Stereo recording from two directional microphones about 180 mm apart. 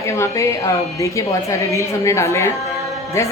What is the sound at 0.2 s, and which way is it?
A woman's voice, 15° left (ahead or behind).